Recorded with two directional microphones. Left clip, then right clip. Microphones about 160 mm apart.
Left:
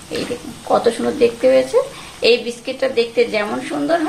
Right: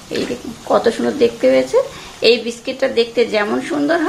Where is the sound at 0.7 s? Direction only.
20° right (ahead or behind).